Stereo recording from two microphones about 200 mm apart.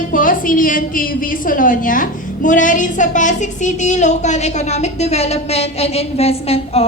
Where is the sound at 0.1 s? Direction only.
45° left (ahead or behind).